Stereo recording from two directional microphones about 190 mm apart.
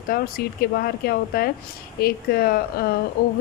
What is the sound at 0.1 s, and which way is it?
Speech, 50° left (ahead or behind).